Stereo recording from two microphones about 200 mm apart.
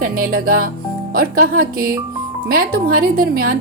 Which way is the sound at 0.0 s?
45° right (ahead or behind).